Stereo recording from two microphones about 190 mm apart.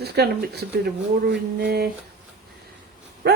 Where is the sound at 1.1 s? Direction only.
55° right (ahead or behind).